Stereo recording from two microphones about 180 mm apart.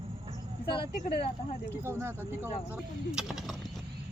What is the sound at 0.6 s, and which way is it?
Speech, 30° left (ahead or behind).